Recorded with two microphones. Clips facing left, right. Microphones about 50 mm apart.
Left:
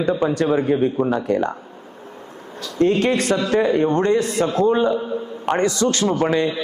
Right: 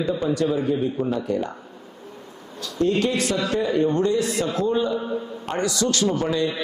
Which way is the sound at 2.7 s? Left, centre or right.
Left.